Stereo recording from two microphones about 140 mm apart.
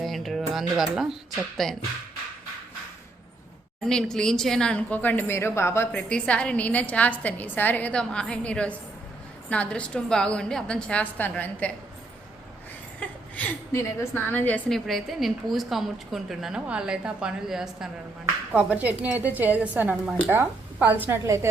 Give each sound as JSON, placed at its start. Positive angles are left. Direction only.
{"t": 0.0, "sound": "speech", "side_deg": 0}
{"t": 3.8, "sound": "a woman's voice", "side_deg": 5}
{"t": 5.9, "sound": "a woman's voice", "side_deg": 5}
{"t": 13.3, "sound": "a woman's voice", "side_deg": 15}
{"t": 14.8, "sound": "a woman's voice", "side_deg": 0}